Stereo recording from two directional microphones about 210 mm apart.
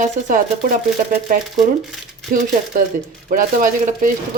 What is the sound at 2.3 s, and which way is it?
Speech, 40° right (ahead or behind).